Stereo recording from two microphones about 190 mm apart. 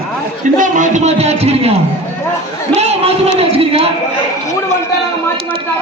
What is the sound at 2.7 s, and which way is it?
A man's voice, 35° right (ahead or behind).